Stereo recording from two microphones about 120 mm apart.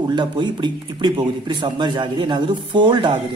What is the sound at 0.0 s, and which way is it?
Speech, 40° right (ahead or behind).